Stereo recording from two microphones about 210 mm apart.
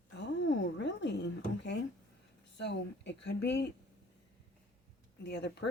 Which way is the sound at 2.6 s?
55° left (ahead or behind).